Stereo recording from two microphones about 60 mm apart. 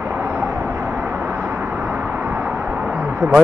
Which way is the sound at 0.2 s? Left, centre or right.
Right.